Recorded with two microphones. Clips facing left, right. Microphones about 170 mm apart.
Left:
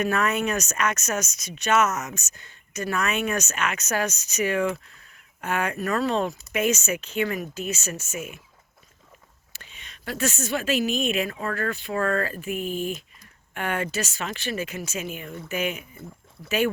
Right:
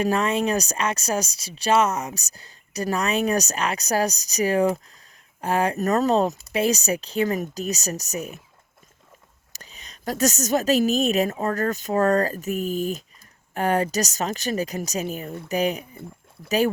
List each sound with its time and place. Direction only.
0.0 s speech: 30° right (ahead or behind)
9.5 s speech: 40° right (ahead or behind)